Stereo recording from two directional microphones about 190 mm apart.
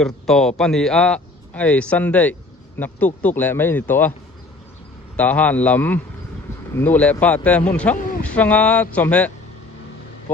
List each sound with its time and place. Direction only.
0.0 s speech: centre (ahead or behind)
5.1 s speech: 10° left (ahead or behind)